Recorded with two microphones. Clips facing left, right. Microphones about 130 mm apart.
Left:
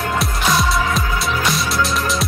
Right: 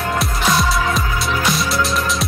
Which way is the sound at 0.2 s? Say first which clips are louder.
Right 1 dB; centre (ahead or behind).